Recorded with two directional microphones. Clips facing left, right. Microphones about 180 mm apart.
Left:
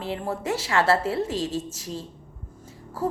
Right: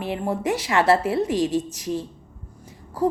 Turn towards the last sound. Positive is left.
turn(degrees=-15)  # may be behind; listen again after turning